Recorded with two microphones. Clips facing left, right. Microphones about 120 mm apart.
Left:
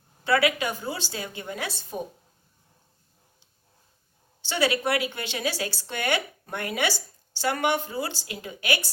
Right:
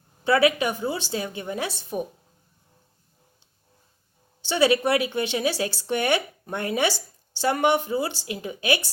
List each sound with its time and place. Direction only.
0.3 s a woman's voice: 25° right (ahead or behind)
4.4 s a woman's voice: 25° right (ahead or behind)